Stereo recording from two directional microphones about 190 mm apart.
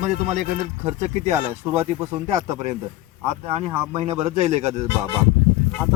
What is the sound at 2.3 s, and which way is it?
Speech, 35° right (ahead or behind).